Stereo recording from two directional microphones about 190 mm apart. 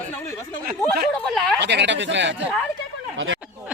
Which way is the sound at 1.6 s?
65° right (ahead or behind).